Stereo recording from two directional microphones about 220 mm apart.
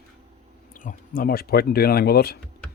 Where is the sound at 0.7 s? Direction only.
40° left (ahead or behind).